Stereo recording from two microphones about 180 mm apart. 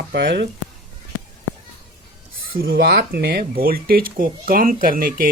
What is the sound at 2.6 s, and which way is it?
Speech, 65° right (ahead or behind).